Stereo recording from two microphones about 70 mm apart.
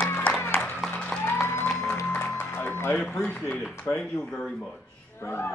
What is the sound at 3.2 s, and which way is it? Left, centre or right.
Speech, centre.